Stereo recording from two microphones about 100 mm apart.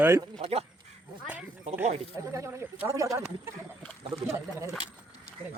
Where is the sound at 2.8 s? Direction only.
30° right (ahead or behind).